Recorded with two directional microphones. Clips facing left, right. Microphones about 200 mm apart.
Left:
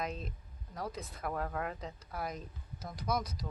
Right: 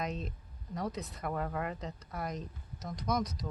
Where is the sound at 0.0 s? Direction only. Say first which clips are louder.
Right 2 dB; centre (ahead or behind).